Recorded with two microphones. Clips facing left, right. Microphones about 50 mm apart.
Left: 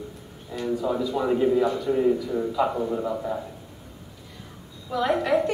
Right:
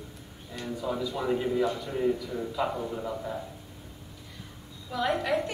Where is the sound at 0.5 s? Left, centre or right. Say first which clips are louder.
Left 7 dB; centre.